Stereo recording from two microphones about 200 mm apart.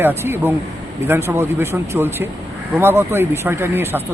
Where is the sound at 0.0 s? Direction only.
10° right (ahead or behind).